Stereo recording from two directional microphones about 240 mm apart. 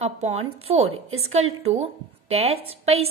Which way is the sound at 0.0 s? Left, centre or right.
Right.